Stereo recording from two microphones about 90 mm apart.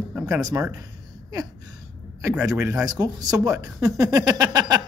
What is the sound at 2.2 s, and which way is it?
A man's voice, 35° right (ahead or behind).